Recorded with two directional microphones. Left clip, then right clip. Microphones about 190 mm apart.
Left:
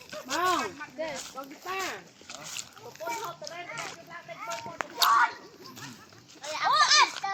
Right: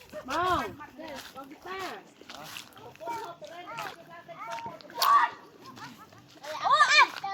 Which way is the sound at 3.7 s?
5° left (ahead or behind).